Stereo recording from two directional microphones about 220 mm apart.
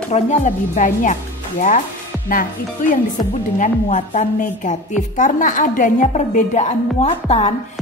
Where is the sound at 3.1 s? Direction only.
35° left (ahead or behind).